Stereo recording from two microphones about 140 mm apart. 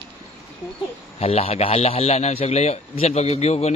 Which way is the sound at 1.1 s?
45° left (ahead or behind).